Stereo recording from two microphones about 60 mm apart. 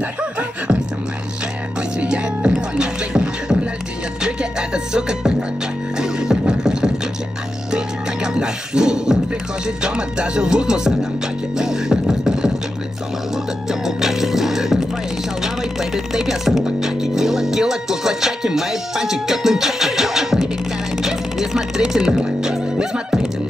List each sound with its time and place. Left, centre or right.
0.2 s beatboxing: centre
1.8 s music: centre
11.5 s beatboxing: centre
13.7 s music: centre
21.0 s chopping: centre